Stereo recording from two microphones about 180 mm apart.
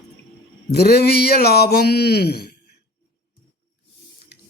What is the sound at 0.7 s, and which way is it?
Speech, 60° left (ahead or behind).